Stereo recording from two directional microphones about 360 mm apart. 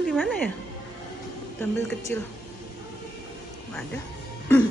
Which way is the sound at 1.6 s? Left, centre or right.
Centre.